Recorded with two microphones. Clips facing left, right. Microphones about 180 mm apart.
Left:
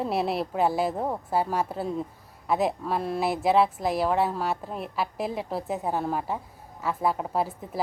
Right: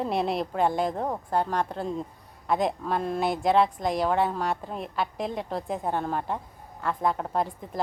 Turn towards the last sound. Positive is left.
turn(degrees=5)  # may be behind; listen again after turning